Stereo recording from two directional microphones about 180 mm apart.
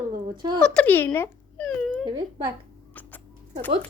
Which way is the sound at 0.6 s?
5° left (ahead or behind).